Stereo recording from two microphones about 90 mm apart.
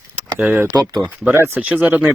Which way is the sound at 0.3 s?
15° right (ahead or behind).